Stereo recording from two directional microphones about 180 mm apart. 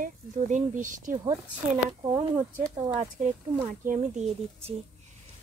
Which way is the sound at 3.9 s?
40° right (ahead or behind).